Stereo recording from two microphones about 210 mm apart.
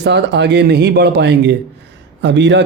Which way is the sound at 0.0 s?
55° right (ahead or behind).